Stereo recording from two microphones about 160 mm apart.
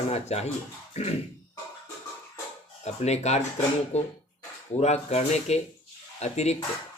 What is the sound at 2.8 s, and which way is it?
Speech, 45° left (ahead or behind).